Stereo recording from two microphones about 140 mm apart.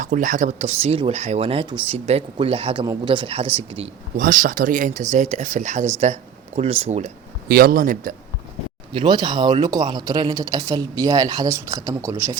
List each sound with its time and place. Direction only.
0.0 s speech: 65° right (ahead or behind); by 3.8 s 45° right (ahead or behind)
4.2 s speech: 70° right (ahead or behind)
6.6 s speech: 45° right (ahead or behind)
7.4 s a man's voice: 90° right
8.9 s speech: 35° right (ahead or behind)